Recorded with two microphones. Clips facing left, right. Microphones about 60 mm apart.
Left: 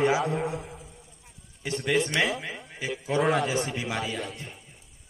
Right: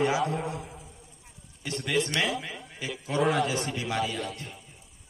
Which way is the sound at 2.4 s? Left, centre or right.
Centre.